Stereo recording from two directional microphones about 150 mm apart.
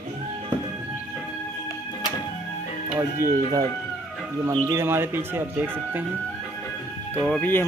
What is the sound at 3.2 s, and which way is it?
Speech, 25° right (ahead or behind).